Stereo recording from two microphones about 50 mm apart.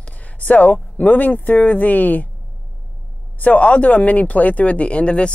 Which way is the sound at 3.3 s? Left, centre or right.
Left.